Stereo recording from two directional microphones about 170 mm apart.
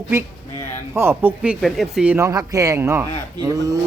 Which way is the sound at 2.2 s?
20° right (ahead or behind).